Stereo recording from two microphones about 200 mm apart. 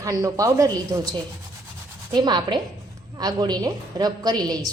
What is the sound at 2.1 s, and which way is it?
A woman's voice, 20° right (ahead or behind).